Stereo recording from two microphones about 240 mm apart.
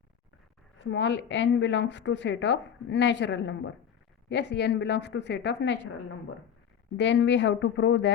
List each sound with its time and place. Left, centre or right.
0.8 s a woman's voice: left
6.9 s a woman's voice: left